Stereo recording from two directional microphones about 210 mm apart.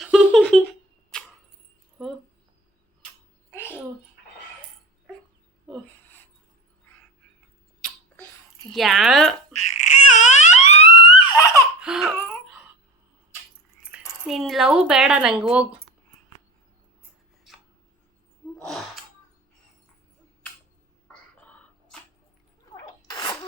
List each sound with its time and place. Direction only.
0.0 s a sound: 5° right (ahead or behind)
2.0 s mouse: centre (ahead or behind)
5.6 s a sound: 5° left (ahead or behind)
7.8 s sneeze: centre (ahead or behind)
8.7 s speech: centre (ahead or behind)
9.6 s crying: 35° left (ahead or behind)
11.3 s laughter: 15° left (ahead or behind)
11.8 s a sound: 5° right (ahead or behind)
13.9 s speech: centre (ahead or behind)
23.0 s sneeze: 20° left (ahead or behind)